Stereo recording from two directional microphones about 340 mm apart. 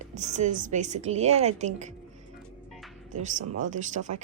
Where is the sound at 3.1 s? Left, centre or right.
Right.